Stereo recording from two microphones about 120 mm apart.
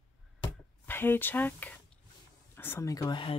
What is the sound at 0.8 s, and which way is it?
Speech, 15° left (ahead or behind).